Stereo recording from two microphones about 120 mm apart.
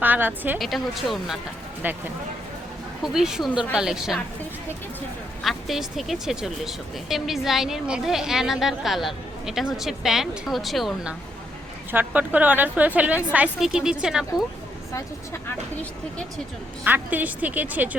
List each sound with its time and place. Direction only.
0.0 s a woman's voice: 15° right (ahead or behind)
0.6 s a woman's voice: centre (ahead or behind)
3.0 s a woman's voice: 5° right (ahead or behind)
5.4 s a woman's voice: centre (ahead or behind)
11.9 s a woman's voice: 15° right (ahead or behind)
14.9 s speech: 20° left (ahead or behind)
16.8 s a woman's voice: 15° right (ahead or behind)